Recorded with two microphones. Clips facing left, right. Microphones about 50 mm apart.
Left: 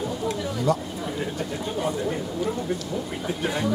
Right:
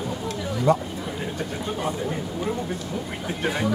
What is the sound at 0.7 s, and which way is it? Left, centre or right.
Speech, right.